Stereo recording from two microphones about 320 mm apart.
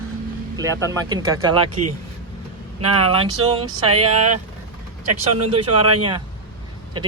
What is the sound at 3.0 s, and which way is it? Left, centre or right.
Speech, centre.